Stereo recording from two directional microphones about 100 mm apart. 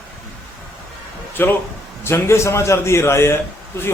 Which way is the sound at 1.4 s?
20° left (ahead or behind).